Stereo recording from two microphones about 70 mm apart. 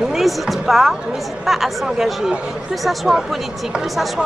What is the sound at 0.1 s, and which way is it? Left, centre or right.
A woman's voice, centre.